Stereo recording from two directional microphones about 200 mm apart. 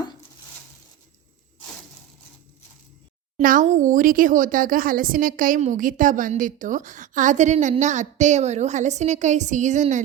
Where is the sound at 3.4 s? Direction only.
40° right (ahead or behind).